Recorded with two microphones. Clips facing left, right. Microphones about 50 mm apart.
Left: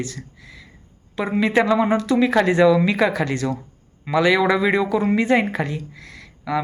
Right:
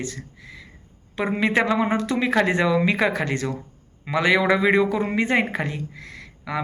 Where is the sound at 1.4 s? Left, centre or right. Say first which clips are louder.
Left 4 dB; right.